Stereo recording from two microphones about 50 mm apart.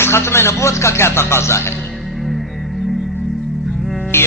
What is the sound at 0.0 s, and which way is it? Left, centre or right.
A man's voice, left.